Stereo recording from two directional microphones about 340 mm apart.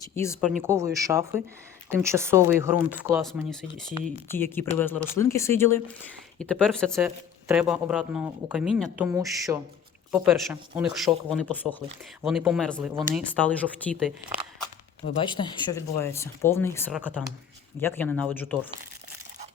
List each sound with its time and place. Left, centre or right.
0.0 s speech: centre
0.6 s speech: centre
15.2 s speech: centre